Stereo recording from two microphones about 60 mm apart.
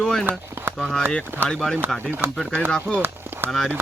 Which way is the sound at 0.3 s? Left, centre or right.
Right.